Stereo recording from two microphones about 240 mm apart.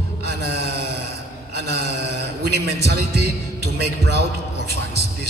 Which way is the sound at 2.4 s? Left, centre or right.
Right.